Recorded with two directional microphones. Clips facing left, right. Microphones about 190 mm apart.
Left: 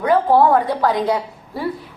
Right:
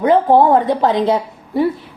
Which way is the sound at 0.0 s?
20° right (ahead or behind).